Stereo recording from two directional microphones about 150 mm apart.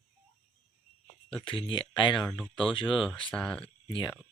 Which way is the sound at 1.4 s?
35° left (ahead or behind).